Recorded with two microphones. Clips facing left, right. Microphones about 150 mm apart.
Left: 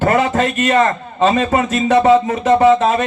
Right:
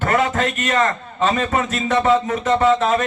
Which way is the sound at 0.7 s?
30° left (ahead or behind).